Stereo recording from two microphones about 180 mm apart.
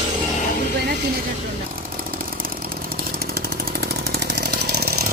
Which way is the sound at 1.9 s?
55° right (ahead or behind).